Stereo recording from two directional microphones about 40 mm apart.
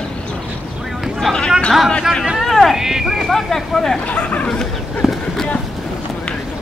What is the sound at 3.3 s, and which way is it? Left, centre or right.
Speech, centre.